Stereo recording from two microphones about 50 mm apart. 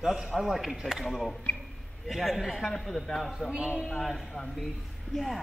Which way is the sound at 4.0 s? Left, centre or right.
Centre.